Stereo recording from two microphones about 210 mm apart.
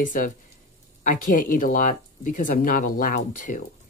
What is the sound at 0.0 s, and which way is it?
Speech, 40° left (ahead or behind).